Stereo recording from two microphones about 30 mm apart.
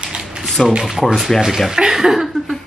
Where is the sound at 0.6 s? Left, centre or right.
Centre.